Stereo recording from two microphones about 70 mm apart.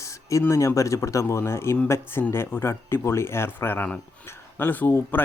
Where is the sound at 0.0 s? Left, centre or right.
Left.